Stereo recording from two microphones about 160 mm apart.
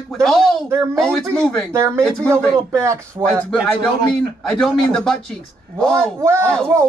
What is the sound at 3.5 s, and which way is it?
A man's voice, 5° left (ahead or behind).